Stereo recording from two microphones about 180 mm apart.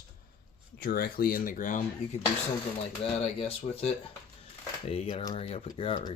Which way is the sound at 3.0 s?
30° left (ahead or behind).